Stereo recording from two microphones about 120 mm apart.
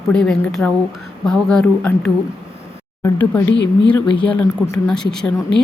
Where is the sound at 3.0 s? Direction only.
20° left (ahead or behind).